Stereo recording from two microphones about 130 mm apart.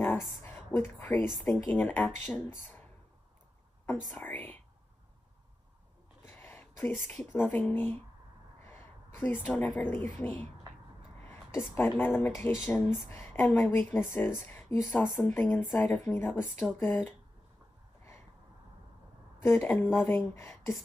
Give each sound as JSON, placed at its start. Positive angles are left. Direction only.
{"t": 0.7, "sound": "speech", "side_deg": 15}
{"t": 6.2, "sound": "speech", "side_deg": 15}
{"t": 8.6, "sound": "a sound", "side_deg": 15}
{"t": 10.1, "sound": "speech", "side_deg": 15}
{"t": 19.4, "sound": "a woman's voice", "side_deg": 20}